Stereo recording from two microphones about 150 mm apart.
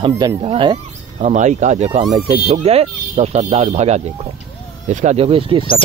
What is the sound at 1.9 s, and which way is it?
Speech, 30° right (ahead or behind).